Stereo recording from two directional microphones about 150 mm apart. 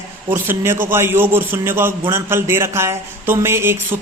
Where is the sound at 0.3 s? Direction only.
15° right (ahead or behind).